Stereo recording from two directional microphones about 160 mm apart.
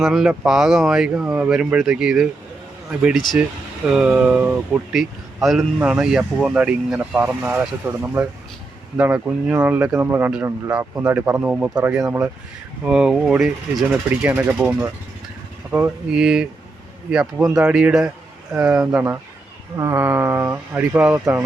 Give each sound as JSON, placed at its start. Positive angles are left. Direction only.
{"t": 0.0, "sound": "speech", "side_deg": -5}
{"t": 12.8, "sound": "speech", "side_deg": -5}